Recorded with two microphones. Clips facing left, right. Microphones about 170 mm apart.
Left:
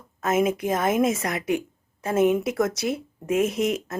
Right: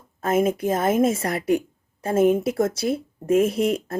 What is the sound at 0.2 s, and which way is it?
A woman's voice, 30° right (ahead or behind).